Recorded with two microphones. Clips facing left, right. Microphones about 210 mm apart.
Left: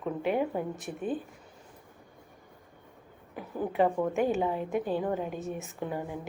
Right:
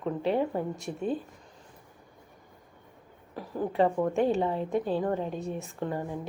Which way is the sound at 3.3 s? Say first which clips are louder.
Right 1 dB; 5° left (ahead or behind).